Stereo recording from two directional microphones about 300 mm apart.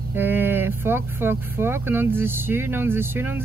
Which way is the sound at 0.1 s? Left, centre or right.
Centre.